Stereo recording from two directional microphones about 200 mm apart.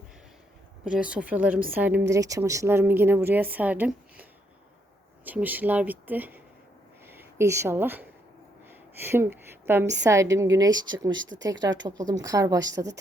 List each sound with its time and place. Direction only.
0.9 s a woman's voice: 5° right (ahead or behind)
11.1 s speech: 70° right (ahead or behind)
11.4 s speech: 20° right (ahead or behind)